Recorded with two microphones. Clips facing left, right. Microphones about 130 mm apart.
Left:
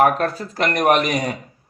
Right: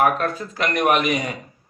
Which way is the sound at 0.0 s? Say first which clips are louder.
Left 3 dB; 40° left (ahead or behind).